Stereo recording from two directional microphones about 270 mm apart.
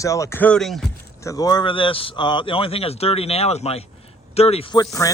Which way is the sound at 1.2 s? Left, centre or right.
Centre.